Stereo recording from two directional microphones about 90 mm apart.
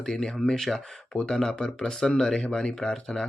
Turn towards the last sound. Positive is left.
turn(degrees=5)  # may be behind; listen again after turning